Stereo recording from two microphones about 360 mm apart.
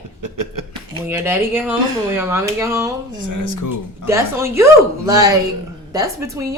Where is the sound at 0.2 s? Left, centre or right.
Right.